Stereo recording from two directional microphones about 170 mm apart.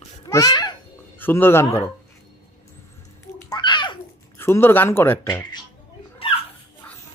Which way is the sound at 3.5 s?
25° left (ahead or behind).